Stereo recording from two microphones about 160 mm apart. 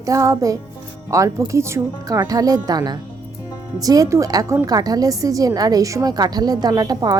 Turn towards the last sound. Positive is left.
turn(degrees=-25)  # may be behind; listen again after turning